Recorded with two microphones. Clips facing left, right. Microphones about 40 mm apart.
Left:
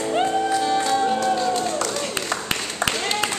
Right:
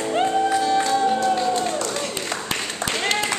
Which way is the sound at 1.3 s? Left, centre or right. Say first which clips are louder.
Even; centre.